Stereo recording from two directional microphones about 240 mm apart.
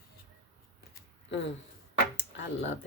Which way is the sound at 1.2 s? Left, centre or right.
Left.